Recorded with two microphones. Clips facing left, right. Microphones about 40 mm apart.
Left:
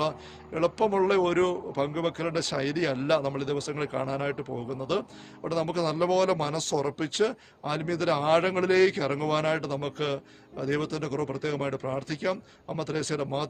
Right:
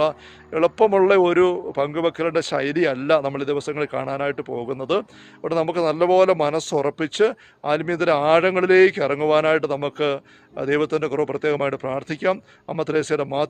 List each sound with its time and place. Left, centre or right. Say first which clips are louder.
0.0 s a man's voice: right 8 dB; right